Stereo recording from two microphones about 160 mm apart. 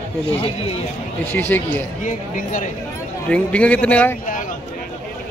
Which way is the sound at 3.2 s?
5° left (ahead or behind).